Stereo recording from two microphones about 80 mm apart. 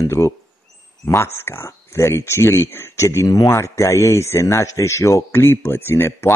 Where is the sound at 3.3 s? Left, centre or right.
Left.